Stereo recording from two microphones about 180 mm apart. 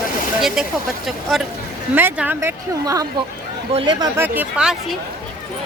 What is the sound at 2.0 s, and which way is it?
A woman's voice, 10° right (ahead or behind).